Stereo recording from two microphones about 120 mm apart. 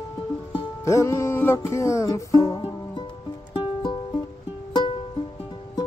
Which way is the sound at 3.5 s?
40° left (ahead or behind).